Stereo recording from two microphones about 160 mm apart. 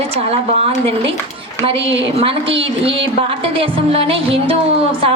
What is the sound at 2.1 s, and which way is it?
Speech, 35° right (ahead or behind).